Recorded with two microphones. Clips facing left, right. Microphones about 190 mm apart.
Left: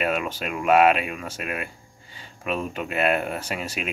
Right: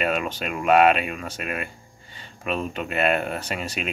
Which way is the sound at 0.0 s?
5° left (ahead or behind).